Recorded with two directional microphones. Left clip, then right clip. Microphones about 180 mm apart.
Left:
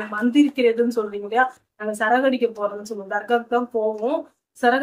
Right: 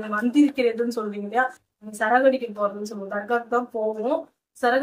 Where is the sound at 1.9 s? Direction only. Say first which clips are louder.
Even; 20° left (ahead or behind).